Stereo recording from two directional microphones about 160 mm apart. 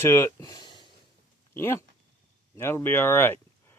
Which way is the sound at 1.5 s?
15° left (ahead or behind).